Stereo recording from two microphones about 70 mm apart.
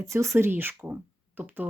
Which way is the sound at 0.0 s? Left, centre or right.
Right.